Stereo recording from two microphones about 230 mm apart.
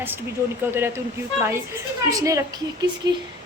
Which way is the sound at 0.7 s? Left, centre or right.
Centre.